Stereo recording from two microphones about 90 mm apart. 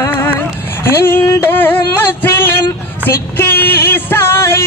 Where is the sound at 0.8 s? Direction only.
25° left (ahead or behind).